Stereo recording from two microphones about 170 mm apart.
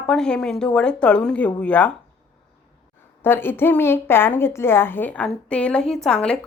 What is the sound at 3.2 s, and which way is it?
A woman's voice, 15° left (ahead or behind).